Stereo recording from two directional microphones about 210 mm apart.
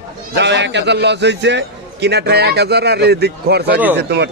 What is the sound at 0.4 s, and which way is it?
A man's voice, 55° right (ahead or behind).